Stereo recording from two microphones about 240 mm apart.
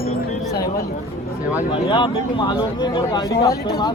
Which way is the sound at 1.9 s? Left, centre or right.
Left.